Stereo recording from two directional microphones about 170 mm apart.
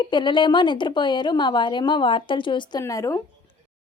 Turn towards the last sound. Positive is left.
turn(degrees=20)  # may be behind; listen again after turning